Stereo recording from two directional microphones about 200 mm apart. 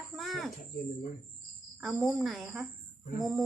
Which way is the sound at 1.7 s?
Centre (ahead or behind).